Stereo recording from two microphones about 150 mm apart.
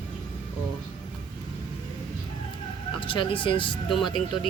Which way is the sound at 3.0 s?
35° left (ahead or behind).